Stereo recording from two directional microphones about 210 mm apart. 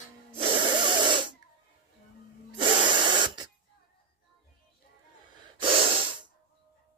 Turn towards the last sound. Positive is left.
turn(degrees=-25)  # may be behind; listen again after turning